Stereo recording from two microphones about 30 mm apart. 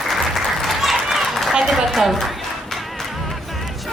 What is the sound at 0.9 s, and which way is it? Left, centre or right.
Run, centre.